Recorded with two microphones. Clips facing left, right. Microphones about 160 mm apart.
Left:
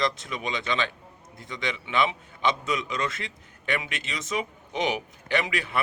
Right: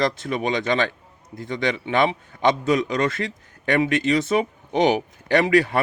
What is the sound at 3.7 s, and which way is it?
Speech, 35° right (ahead or behind).